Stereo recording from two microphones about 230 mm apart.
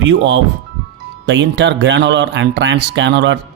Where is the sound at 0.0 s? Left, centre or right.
Right.